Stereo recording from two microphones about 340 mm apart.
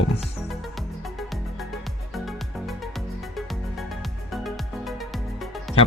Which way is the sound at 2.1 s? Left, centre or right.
Centre.